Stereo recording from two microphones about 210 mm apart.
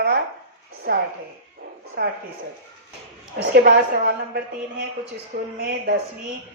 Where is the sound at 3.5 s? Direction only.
50° right (ahead or behind).